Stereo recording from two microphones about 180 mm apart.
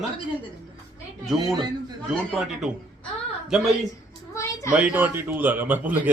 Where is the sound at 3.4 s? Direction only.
Centre (ahead or behind).